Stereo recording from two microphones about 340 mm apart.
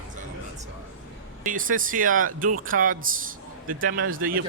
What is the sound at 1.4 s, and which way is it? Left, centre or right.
Speech, right.